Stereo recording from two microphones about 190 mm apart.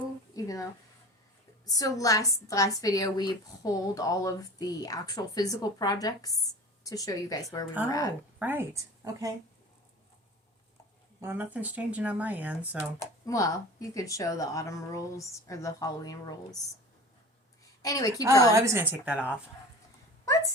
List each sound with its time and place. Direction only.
0.3 s a sound: 20° left (ahead or behind)
1.6 s a woman's voice: 20° left (ahead or behind)
8.4 s a woman's voice: 10° right (ahead or behind)
11.2 s speech: 10° right (ahead or behind)
13.0 s speech: 15° left (ahead or behind)
17.8 s speech: 20° left (ahead or behind)
18.5 s speech: 15° right (ahead or behind)